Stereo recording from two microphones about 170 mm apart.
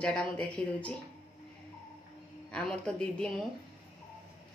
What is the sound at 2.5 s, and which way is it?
Speech, 5° left (ahead or behind).